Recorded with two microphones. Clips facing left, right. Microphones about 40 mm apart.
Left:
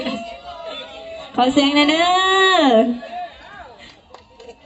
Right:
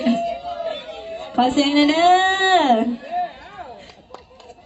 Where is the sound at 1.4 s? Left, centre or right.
Left.